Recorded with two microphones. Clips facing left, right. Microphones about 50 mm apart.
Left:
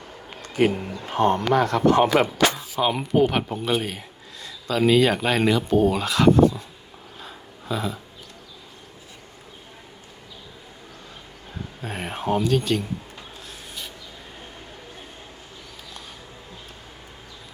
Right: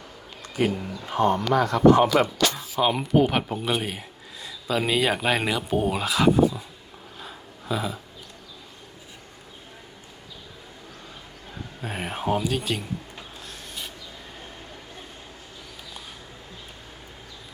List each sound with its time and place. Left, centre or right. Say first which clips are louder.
0.5 s speech: left 4 dB; left
2.8 s speech: left 1 dB; centre
7.2 s a sound: even; centre
11.8 s speech: even; centre